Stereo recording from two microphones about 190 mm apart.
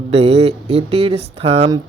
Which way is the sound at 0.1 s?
30° right (ahead or behind).